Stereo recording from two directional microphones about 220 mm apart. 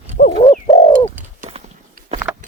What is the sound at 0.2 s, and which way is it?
Bird, 40° left (ahead or behind).